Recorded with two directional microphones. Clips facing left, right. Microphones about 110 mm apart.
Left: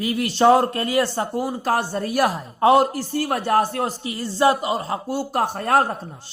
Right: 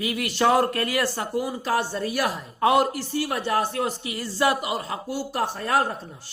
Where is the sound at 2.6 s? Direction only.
30° left (ahead or behind).